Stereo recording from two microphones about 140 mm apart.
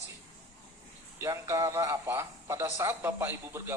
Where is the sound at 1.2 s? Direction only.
20° right (ahead or behind).